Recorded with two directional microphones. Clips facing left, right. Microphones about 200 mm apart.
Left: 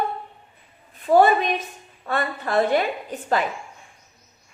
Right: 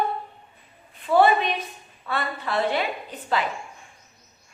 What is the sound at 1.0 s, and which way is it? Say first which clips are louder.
Speech: left 2 dB; 45° left (ahead or behind).